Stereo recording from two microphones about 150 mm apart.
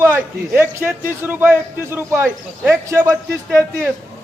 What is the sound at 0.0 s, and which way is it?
A man's voice, 15° right (ahead or behind).